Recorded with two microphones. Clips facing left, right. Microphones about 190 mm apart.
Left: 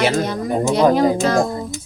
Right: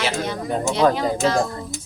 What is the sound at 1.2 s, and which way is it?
Child singing, 40° left (ahead or behind).